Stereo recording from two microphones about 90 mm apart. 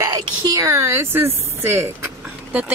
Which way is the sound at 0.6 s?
35° right (ahead or behind).